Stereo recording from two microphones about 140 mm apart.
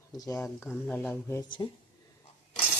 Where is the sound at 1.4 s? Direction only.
35° left (ahead or behind).